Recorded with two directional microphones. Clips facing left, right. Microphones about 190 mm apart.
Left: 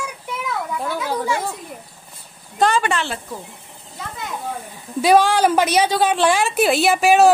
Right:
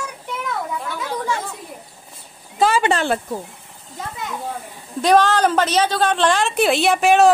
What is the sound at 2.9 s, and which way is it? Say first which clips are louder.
Speech: right 3 dB; 35° right (ahead or behind).